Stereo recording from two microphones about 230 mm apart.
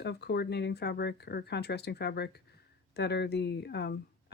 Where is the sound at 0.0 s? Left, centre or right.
Left.